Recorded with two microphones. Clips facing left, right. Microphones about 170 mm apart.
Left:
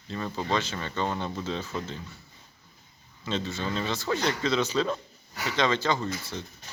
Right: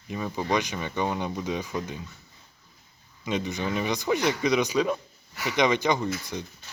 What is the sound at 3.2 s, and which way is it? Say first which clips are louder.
Speech: right 2 dB; 15° right (ahead or behind).